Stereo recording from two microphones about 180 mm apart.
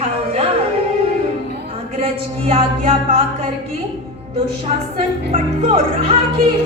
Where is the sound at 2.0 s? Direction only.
35° right (ahead or behind).